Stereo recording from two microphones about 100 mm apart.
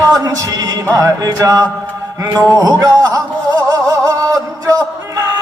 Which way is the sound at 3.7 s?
40° right (ahead or behind).